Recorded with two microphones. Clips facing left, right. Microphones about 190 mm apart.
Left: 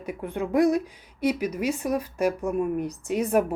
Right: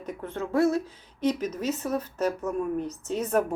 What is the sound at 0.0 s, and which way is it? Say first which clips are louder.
Speech: left 3 dB; 10° left (ahead or behind).